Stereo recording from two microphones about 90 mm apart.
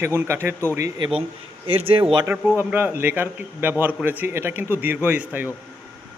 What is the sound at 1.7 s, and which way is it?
Speech, 90° right.